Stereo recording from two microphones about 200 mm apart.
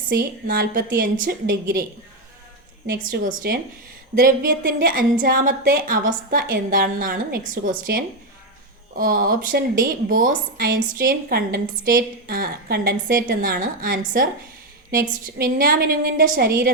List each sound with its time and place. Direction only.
0.1 s a woman's voice: 45° right (ahead or behind)
2.8 s a woman's voice: 45° right (ahead or behind)
15.4 s a woman's voice: 45° right (ahead or behind)